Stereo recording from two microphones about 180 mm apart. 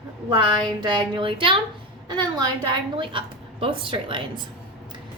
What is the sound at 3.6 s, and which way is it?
Speech, 30° right (ahead or behind).